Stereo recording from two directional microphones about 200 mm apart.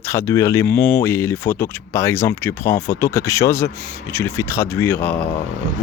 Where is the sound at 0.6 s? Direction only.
55° left (ahead or behind).